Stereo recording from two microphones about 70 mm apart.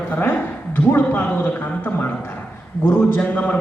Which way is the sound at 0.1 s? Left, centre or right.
Left.